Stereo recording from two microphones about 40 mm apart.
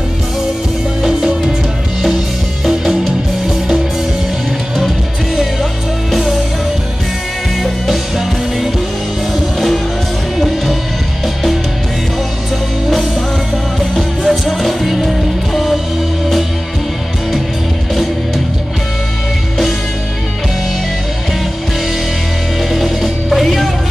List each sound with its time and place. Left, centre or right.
2.7 s music: centre
7.6 s music: centre
9.3 s music: centre
13.7 s music: centre
22.7 s music: centre